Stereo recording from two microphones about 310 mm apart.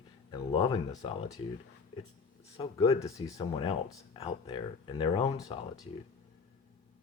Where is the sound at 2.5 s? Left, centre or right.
Centre.